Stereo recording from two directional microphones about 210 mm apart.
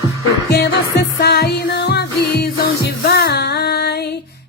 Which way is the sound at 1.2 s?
50° left (ahead or behind).